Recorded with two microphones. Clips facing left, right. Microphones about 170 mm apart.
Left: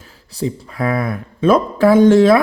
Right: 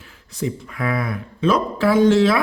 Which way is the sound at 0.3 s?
35° left (ahead or behind).